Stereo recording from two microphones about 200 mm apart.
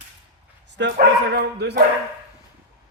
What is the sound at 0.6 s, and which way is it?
Speech, 60° right (ahead or behind).